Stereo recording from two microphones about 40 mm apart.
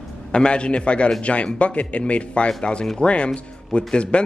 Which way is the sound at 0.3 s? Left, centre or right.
Left.